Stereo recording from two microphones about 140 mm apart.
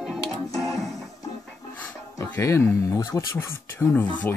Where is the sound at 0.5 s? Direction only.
25° left (ahead or behind).